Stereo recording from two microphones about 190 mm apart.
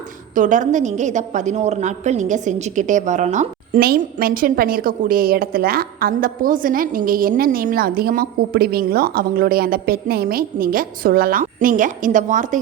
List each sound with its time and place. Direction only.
0.3 s a woman's voice: 40° right (ahead or behind)
3.8 s a woman's voice: 55° right (ahead or behind)